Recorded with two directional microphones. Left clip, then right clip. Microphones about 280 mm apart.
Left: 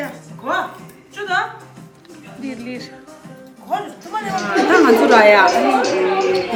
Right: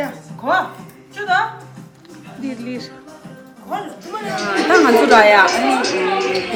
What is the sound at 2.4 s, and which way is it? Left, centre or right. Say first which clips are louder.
Speech: right 2 dB; centre.